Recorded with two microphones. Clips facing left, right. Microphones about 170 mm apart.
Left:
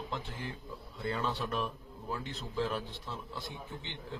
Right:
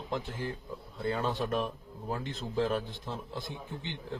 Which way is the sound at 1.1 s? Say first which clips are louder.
Right 4 dB; 50° right (ahead or behind).